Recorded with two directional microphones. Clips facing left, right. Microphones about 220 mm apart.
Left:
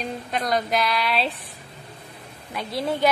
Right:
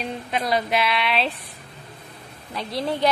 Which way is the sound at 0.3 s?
5° right (ahead or behind).